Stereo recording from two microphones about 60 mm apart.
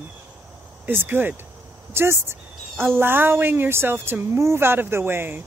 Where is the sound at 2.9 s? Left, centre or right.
Right.